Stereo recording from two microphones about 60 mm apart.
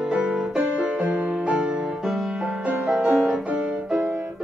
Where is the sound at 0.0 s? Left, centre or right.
Centre.